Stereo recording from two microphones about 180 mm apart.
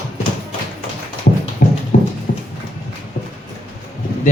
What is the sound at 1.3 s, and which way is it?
Clip-clop, 55° left (ahead or behind).